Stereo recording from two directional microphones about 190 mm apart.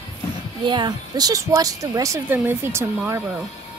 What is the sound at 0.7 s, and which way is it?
A woman's voice, 25° right (ahead or behind).